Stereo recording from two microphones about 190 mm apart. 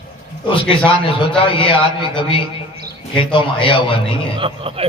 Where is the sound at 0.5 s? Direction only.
25° left (ahead or behind).